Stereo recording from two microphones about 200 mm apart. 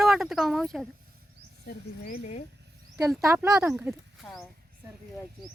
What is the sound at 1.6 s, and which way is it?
Speech, 45° left (ahead or behind).